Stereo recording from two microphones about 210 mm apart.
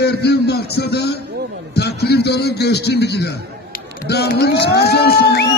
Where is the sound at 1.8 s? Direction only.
50° left (ahead or behind).